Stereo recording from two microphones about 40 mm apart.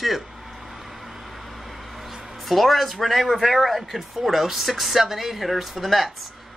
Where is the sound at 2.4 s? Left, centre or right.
Centre.